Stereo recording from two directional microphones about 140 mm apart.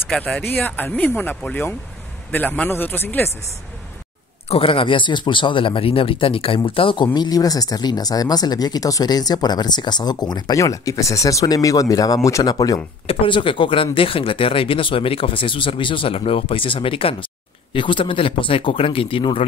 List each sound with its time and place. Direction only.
0.1 s speech: 5° left (ahead or behind)
4.5 s speech: 40° left (ahead or behind)
7.2 s speech: 25° left (ahead or behind)
13.0 s speech: 40° left (ahead or behind)